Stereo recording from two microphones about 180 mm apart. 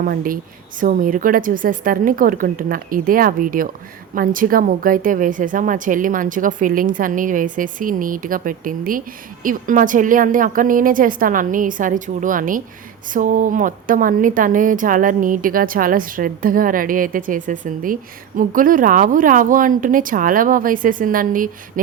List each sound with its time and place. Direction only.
0.0 s a woman's voice: 50° right (ahead or behind)